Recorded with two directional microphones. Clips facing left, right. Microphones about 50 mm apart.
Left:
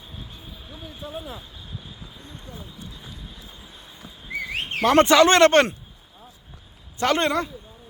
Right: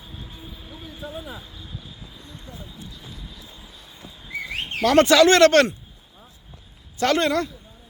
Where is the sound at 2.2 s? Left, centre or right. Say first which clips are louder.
Even; left.